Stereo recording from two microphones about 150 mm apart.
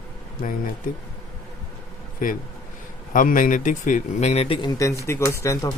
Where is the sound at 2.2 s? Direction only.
65° left (ahead or behind); by 4.7 s 40° left (ahead or behind).